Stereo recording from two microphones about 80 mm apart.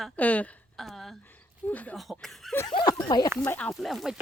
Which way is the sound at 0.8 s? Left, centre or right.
Centre.